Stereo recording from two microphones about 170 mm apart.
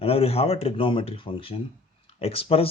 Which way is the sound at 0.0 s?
35° left (ahead or behind).